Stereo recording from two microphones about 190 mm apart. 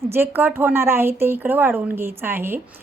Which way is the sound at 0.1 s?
10° right (ahead or behind).